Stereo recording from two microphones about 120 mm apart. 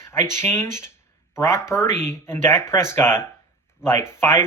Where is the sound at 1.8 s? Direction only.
75° right (ahead or behind).